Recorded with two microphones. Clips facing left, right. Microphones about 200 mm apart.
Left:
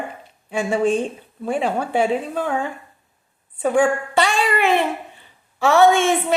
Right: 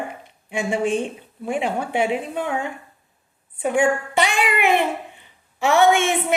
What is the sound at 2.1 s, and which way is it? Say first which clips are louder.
A woman's voice: left 2 dB; 20° right (ahead or behind).